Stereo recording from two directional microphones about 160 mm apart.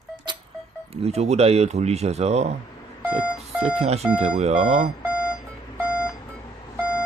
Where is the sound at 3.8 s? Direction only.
40° right (ahead or behind).